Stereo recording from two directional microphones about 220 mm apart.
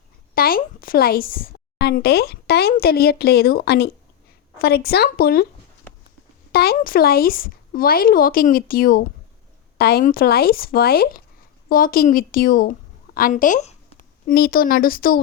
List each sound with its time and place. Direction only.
0.3 s a woman's voice: 40° left (ahead or behind)
6.5 s speech: 45° left (ahead or behind)